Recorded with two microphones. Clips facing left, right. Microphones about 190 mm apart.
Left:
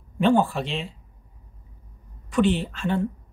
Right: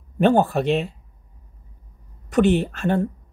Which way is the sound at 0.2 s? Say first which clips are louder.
Right 3 dB; 45° right (ahead or behind).